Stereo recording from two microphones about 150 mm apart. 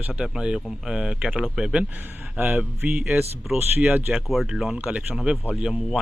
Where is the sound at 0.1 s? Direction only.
5° right (ahead or behind).